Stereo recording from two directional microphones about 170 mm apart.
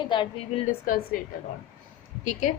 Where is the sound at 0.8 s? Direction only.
55° left (ahead or behind).